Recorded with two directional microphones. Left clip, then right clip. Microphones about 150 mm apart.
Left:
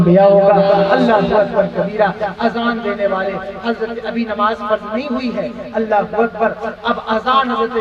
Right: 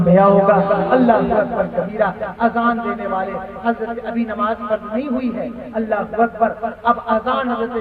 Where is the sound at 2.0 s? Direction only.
20° right (ahead or behind).